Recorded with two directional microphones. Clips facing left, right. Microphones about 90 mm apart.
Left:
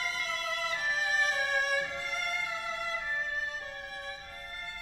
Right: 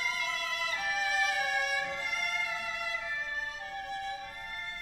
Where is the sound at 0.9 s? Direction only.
35° left (ahead or behind).